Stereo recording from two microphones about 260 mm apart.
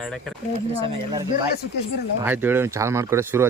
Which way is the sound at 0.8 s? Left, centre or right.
Centre.